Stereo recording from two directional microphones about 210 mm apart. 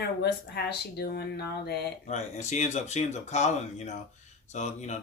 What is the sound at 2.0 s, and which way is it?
Speech, 35° left (ahead or behind).